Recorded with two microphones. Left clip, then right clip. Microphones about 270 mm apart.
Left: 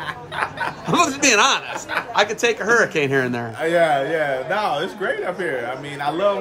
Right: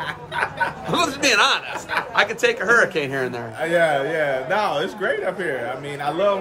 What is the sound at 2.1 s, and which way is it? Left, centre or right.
A man's voice, left.